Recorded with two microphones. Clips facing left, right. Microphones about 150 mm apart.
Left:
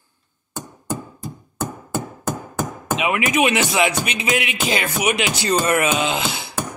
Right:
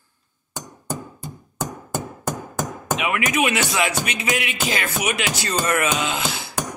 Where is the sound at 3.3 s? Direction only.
20° left (ahead or behind).